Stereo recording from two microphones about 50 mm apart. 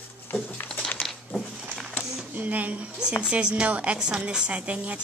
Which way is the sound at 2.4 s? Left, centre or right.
Right.